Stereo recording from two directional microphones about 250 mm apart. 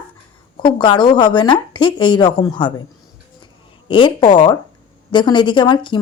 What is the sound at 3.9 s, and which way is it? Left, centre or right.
A woman's voice, centre.